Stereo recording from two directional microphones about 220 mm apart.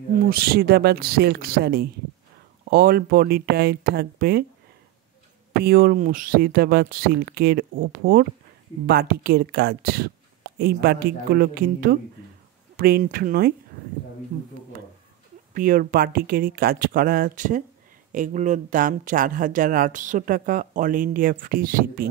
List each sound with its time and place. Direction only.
0.1 s speech: 40° right (ahead or behind)
5.6 s speech: 45° right (ahead or behind)
15.5 s speech: 40° right (ahead or behind)